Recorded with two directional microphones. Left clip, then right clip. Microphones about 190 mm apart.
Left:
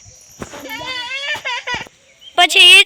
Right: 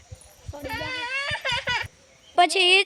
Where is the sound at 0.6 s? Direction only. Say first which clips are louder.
Left 4 dB; 35° left (ahead or behind).